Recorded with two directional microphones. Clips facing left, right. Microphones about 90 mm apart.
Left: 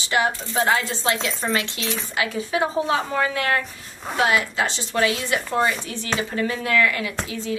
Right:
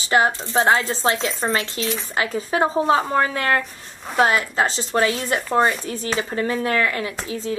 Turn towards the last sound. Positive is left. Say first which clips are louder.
# right 1 dB
turn(degrees=-35)  # may be behind; listen again after turning